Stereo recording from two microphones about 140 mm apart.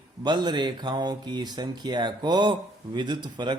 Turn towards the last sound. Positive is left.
turn(degrees=-30)  # may be behind; listen again after turning